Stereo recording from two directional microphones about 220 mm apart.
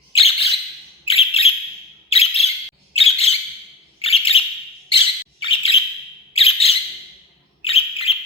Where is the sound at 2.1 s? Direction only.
25° left (ahead or behind).